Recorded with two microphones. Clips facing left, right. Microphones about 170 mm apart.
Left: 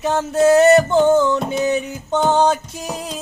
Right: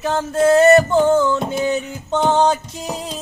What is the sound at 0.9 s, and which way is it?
Music, centre (ahead or behind).